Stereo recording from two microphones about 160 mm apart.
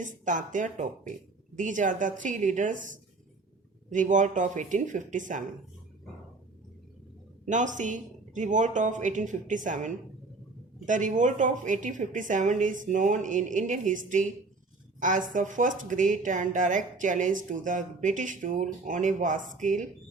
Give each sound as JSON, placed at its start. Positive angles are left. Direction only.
{"t": 0.0, "sound": "speech", "side_deg": -50}
{"t": 7.4, "sound": "speech", "side_deg": -50}